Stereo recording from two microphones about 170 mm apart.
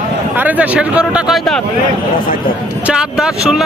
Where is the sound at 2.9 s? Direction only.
5° right (ahead or behind).